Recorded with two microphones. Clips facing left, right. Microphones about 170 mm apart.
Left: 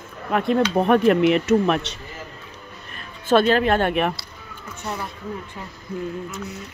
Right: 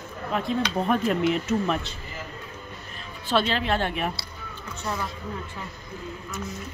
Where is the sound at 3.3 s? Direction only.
50° left (ahead or behind).